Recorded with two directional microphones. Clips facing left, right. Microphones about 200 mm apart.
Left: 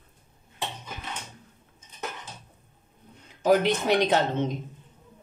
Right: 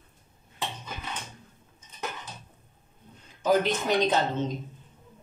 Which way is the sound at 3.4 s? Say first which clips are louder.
Left 3 dB; 70° left (ahead or behind).